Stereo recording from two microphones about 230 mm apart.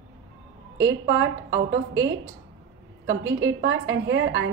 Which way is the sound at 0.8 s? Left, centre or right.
Right.